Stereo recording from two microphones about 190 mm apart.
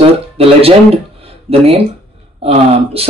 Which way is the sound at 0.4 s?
30° right (ahead or behind).